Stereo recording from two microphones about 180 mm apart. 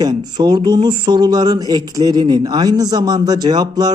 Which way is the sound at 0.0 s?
25° right (ahead or behind).